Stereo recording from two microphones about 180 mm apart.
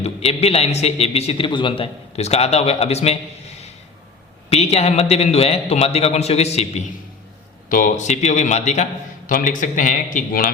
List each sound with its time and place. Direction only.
0.0 s a man's voice: 35° left (ahead or behind)
4.4 s a man's voice: 35° left (ahead or behind)
7.7 s a man's voice: 45° left (ahead or behind)